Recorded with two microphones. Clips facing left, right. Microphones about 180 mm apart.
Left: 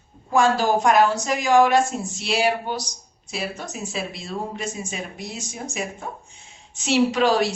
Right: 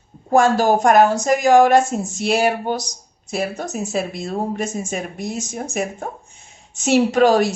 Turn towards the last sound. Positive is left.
turn(degrees=-45)  # may be behind; listen again after turning